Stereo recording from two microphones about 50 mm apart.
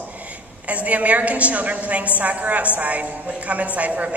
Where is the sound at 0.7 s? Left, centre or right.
Right.